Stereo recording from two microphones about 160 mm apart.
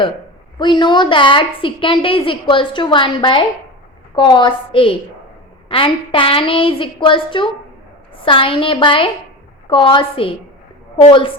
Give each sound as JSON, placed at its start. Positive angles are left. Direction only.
{"t": 0.6, "sound": "a woman's voice", "side_deg": 30}